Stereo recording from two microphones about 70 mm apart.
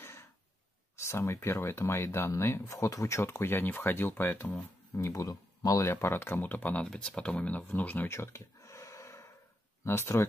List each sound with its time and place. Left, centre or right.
0.0 s a sound: left
0.9 s speech: left
3.2 s speech: left
4.9 s speech: left
5.9 s speech: left
8.1 s gasp: left
9.8 s speech: left